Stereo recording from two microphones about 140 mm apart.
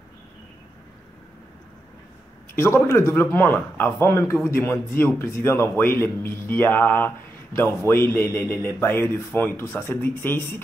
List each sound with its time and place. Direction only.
2.5 s speech: 20° left (ahead or behind)